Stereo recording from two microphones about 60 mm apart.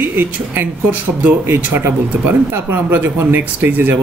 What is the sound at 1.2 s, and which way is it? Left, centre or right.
Speech, right.